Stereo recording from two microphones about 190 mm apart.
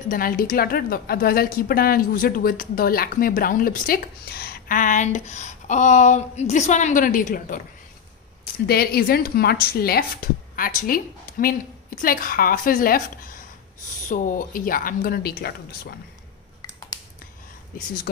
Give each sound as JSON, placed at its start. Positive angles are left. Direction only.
{"t": 0.1, "sound": "a woman's voice", "side_deg": 50}
{"t": 8.6, "sound": "a woman's voice", "side_deg": 55}